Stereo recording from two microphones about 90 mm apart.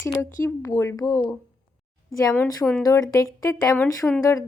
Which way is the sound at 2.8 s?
40° left (ahead or behind).